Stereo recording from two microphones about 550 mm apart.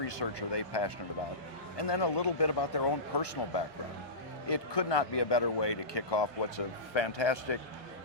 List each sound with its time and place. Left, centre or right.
0.0 s speech: left